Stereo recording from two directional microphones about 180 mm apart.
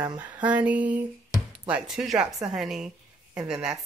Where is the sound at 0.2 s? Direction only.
10° right (ahead or behind).